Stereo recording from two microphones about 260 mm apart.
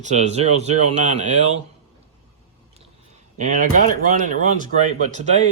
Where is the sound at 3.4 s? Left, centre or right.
Right.